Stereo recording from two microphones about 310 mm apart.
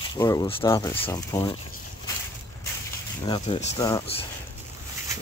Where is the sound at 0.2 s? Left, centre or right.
Centre.